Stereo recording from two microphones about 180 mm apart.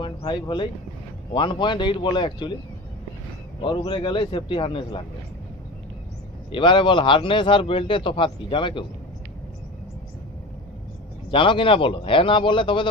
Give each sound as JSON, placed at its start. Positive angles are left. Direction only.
{"t": 0.0, "sound": "a man's voice", "side_deg": 25}
{"t": 3.6, "sound": "a man's voice", "side_deg": 30}
{"t": 6.5, "sound": "a man's voice", "side_deg": 25}
{"t": 11.3, "sound": "a man's voice", "side_deg": 30}